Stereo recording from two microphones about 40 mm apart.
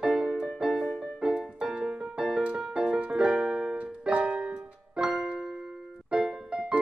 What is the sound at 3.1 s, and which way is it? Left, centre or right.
Music, right.